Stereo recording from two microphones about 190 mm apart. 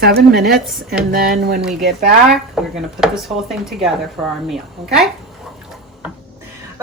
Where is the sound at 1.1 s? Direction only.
50° right (ahead or behind).